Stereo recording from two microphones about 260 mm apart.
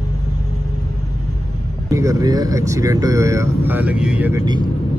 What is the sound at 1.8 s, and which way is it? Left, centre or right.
Speech, centre.